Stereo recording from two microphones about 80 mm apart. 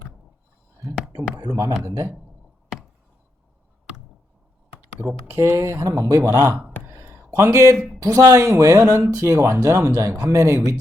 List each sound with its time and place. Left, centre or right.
1.1 s a sound: right
1.8 s speech: right
4.9 s speech: right
5.4 s speech: right
6.6 s a sound: right
7.3 s speech: right